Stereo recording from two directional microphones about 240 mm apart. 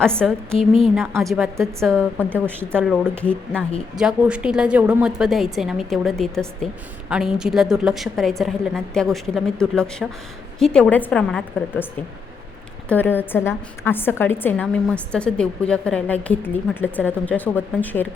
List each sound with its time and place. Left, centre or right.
0.0 s a woman's voice: centre
0.6 s a woman's voice: left
0.9 s a woman's voice: centre
1.2 s a woman's voice: centre
12.9 s a woman's voice: centre